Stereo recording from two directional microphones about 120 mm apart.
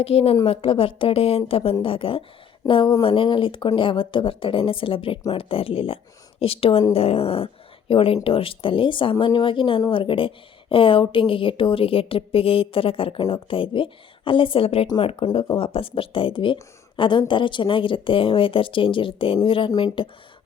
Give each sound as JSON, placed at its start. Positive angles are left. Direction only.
{"t": 0.0, "sound": "a woman's voice", "side_deg": 55}
{"t": 15.0, "sound": "speech", "side_deg": 40}
{"t": 15.5, "sound": "a woman's voice", "side_deg": 50}